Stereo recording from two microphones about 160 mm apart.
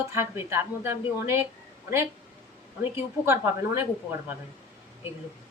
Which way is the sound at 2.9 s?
15° right (ahead or behind).